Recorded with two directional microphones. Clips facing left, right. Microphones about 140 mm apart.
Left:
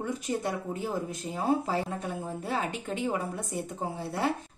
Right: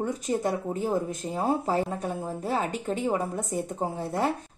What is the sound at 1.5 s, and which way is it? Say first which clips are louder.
A woman's voice: right 1 dB; 40° right (ahead or behind).